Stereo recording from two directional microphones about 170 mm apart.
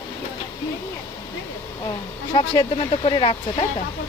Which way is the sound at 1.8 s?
25° left (ahead or behind).